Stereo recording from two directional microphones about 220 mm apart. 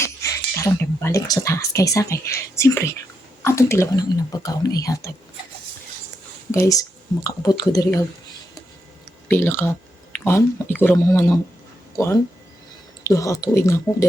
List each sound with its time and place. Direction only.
0.0 s speech: 15° left (ahead or behind)
6.5 s speech: 15° left (ahead or behind)
9.3 s speech: 10° left (ahead or behind)